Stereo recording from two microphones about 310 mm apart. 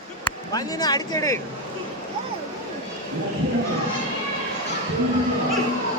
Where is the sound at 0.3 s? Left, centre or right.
Centre.